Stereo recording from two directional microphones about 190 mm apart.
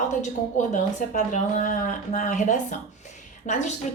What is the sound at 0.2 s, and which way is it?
A woman's voice, 40° left (ahead or behind).